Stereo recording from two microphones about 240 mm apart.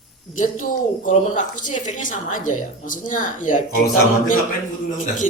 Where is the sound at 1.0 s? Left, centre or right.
Left.